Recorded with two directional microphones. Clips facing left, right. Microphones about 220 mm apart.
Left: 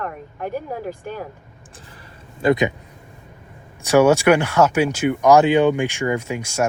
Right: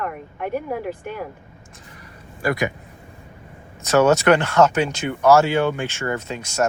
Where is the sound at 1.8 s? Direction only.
30° left (ahead or behind).